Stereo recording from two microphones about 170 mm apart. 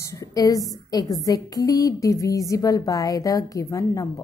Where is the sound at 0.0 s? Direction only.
20° left (ahead or behind).